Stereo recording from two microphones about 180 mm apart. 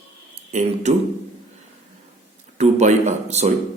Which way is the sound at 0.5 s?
40° right (ahead or behind).